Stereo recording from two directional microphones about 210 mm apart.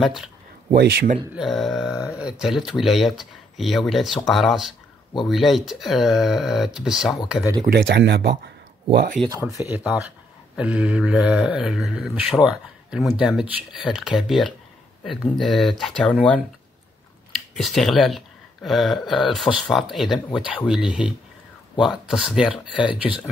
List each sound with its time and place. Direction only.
0.0 s speech: centre (ahead or behind)
0.7 s speech: 55° right (ahead or behind)
1.3 s speech: centre (ahead or behind)
7.6 s speech: 50° right (ahead or behind)
9.3 s speech: 15° right (ahead or behind); by 16.3 s 5° left (ahead or behind)
17.6 s speech: centre (ahead or behind)